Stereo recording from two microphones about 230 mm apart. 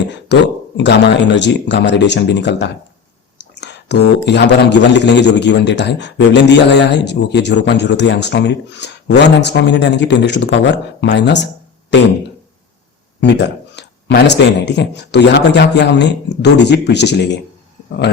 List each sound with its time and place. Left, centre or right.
0.3 s a man's voice: left
13.7 s a man's voice: left